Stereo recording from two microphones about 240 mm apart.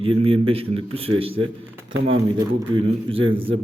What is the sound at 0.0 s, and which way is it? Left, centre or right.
A man's voice, right.